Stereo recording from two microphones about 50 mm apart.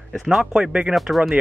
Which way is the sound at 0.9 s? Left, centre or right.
Centre.